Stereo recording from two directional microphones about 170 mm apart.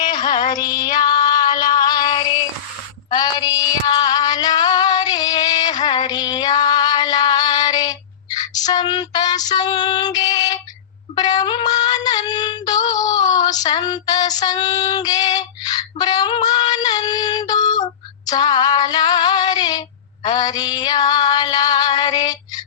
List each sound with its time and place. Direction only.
0.0 s music: 25° left (ahead or behind)
3.1 s female singing: 25° left (ahead or behind)
8.4 s child singing: 20° left (ahead or behind)
11.1 s synthetic singing: 25° left (ahead or behind)
18.3 s female singing: 25° left (ahead or behind)